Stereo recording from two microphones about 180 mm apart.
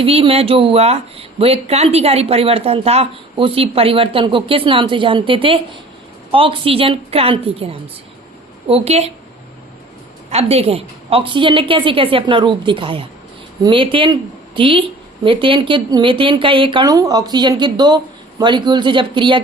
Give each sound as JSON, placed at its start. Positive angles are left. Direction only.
{"t": 0.0, "sound": "speech", "side_deg": -30}
{"t": 10.2, "sound": "speech", "side_deg": -35}